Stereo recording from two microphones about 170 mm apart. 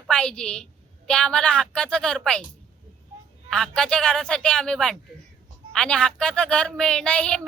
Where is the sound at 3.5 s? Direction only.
5° left (ahead or behind).